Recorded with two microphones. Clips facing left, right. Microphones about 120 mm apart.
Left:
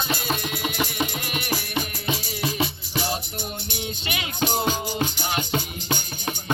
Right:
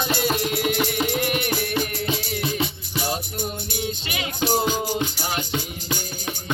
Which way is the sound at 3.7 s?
35° right (ahead or behind).